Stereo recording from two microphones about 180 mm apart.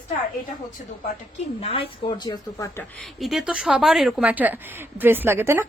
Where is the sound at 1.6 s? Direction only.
30° left (ahead or behind).